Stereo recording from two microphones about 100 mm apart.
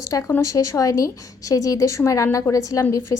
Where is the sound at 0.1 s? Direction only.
35° left (ahead or behind).